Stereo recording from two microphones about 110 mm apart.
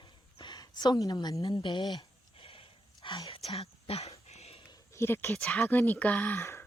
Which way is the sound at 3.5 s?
65° left (ahead or behind).